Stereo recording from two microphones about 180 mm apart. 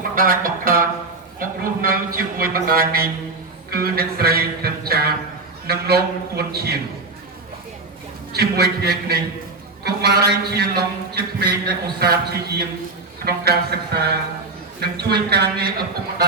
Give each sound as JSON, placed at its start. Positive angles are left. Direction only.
{"t": 0.2, "sound": "speech", "side_deg": -55}
{"t": 1.4, "sound": "a sound", "side_deg": -55}
{"t": 3.7, "sound": "music", "side_deg": -60}
{"t": 5.6, "sound": "a man's voice", "side_deg": -60}
{"t": 8.3, "sound": "a man's voice", "side_deg": -60}